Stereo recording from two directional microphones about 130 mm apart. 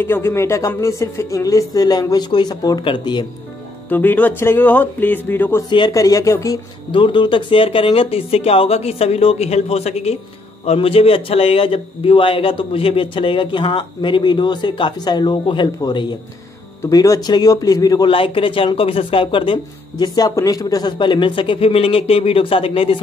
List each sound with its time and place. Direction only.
0.0 s a man's voice: 20° left (ahead or behind); by 3.3 s 35° left (ahead or behind)
3.9 s speech: 15° left (ahead or behind)
5.7 s a man's voice: 35° left (ahead or behind)
5.9 s speech: 25° left (ahead or behind)
6.9 s a man's voice: 40° left (ahead or behind)
18.1 s speech: 45° left (ahead or behind)